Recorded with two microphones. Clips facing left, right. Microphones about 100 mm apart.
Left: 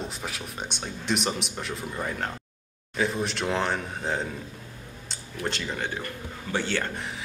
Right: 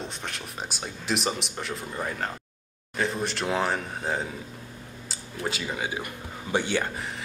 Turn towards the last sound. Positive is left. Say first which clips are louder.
# right 2 dB
turn(degrees=-15)  # may be behind; listen again after turning